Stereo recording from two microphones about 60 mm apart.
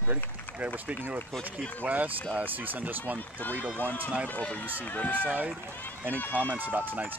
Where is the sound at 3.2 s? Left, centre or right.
Left.